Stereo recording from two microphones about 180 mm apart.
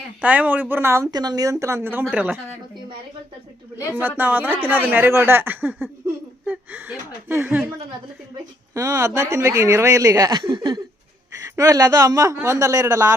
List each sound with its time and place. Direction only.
0.2 s speech: 10° right (ahead or behind)
3.8 s speech: 15° left (ahead or behind)
4.2 s speech: 10° right (ahead or behind)
8.7 s speech: 15° right (ahead or behind)